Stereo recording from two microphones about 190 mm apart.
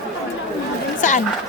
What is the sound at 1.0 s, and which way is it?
Speech, 40° left (ahead or behind).